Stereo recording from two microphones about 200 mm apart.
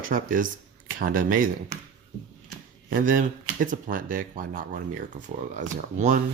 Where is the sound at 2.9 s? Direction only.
45° right (ahead or behind).